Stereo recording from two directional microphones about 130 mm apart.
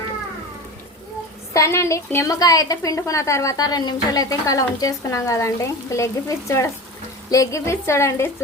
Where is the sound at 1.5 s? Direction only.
20° left (ahead or behind).